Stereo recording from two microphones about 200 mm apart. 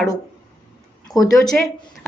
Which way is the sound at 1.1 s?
20° left (ahead or behind).